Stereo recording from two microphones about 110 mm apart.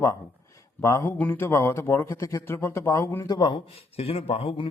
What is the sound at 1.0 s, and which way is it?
Speech, 15° left (ahead or behind).